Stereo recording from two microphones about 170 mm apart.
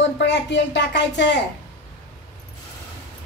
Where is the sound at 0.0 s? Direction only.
90° left.